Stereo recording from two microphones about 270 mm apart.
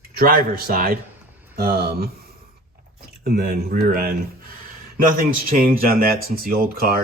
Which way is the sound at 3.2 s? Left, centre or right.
Right.